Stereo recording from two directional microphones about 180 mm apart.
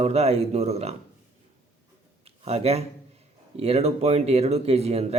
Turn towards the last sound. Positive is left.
turn(degrees=-35)  # may be behind; listen again after turning